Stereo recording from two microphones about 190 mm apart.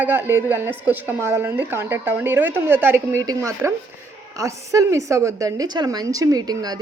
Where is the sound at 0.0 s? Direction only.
10° right (ahead or behind).